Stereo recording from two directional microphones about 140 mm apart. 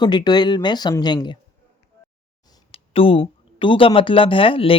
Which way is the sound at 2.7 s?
40° left (ahead or behind).